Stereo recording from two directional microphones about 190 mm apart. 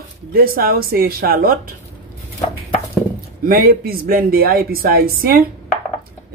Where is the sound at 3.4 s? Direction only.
50° right (ahead or behind).